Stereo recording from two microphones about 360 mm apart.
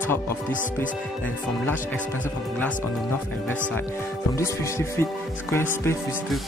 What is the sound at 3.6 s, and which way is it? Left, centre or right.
Speech, centre.